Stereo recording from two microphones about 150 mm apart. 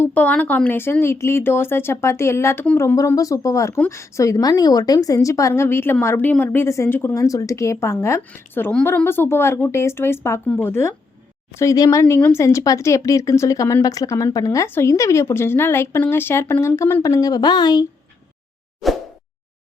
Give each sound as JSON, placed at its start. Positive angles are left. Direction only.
{"t": 0.0, "sound": "a woman's voice", "side_deg": 10}
{"t": 18.8, "sound": "plop", "side_deg": 0}